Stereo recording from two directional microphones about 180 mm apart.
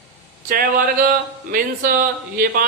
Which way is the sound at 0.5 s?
50° right (ahead or behind).